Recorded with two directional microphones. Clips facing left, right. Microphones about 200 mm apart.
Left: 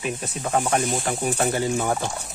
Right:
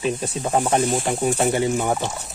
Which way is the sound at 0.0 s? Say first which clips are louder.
Right 5 dB; 30° right (ahead or behind).